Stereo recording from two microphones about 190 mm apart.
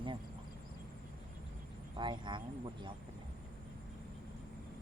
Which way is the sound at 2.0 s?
25° right (ahead or behind).